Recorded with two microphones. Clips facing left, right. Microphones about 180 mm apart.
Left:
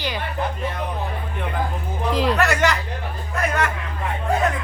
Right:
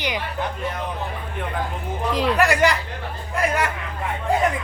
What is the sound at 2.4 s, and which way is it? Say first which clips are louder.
Speech: right 1 dB; 15° right (ahead or behind).